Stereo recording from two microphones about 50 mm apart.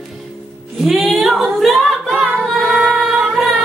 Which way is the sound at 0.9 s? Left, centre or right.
Centre.